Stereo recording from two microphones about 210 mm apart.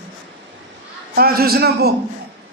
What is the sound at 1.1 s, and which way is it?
Speech, 45° right (ahead or behind).